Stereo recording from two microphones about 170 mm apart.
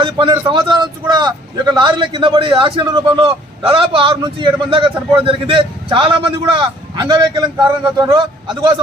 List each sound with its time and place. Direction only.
0.0 s a man's voice: 25° right (ahead or behind)
8.1 s a man's voice: 30° right (ahead or behind)